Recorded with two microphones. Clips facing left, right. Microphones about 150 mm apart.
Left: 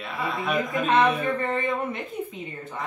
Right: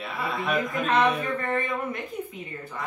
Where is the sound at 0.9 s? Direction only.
25° left (ahead or behind).